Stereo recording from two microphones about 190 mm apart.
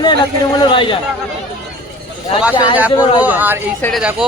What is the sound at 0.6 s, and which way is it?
Speech, 25° left (ahead or behind).